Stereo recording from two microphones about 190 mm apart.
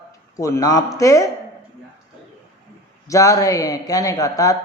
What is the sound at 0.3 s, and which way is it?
Speech, 15° left (ahead or behind).